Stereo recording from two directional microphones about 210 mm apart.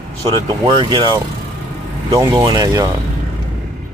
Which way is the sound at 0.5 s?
20° right (ahead or behind).